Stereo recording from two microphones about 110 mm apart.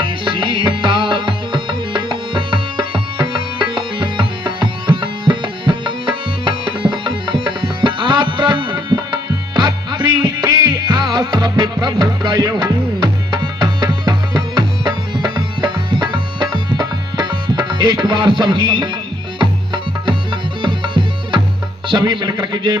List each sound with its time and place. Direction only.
0.0 s music: 50° right (ahead or behind)